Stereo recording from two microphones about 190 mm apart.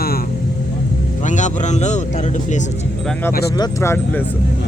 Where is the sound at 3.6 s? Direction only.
15° left (ahead or behind).